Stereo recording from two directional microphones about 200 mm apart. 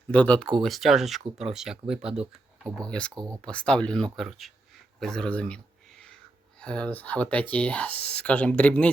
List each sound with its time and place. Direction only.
0.1 s speech: 5° left (ahead or behind)
3.2 s speech: 15° right (ahead or behind)
3.4 s speech: 5° left (ahead or behind)
6.6 s speech: 5° left (ahead or behind)